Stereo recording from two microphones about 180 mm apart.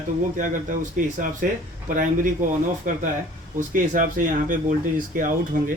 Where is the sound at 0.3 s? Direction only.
45° right (ahead or behind).